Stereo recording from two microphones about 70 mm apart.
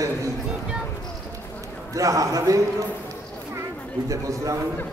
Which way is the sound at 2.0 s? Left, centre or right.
Right.